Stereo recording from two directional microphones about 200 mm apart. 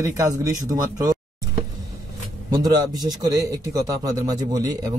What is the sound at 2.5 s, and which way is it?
A man's voice, 20° right (ahead or behind).